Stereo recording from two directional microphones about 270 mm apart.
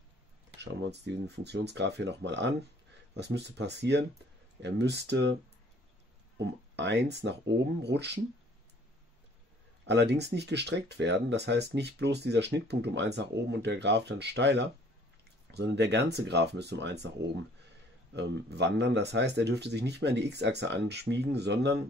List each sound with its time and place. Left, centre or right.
0.6 s speech: right
9.8 s speech: right
18.1 s speech: right